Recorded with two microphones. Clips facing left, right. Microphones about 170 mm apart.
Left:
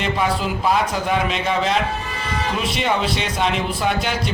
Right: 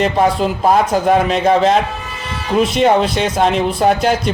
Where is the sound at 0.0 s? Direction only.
45° right (ahead or behind).